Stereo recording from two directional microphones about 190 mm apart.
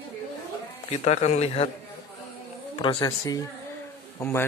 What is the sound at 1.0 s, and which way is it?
Speech, 35° left (ahead or behind).